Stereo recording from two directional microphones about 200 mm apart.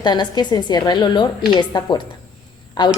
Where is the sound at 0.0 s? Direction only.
20° left (ahead or behind).